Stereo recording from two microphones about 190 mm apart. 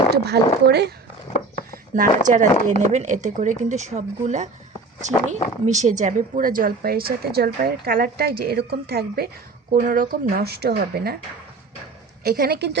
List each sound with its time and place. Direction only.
0.1 s speech: 60° right (ahead or behind)
2.0 s speech: 40° right (ahead or behind)
12.2 s speech: 55° right (ahead or behind)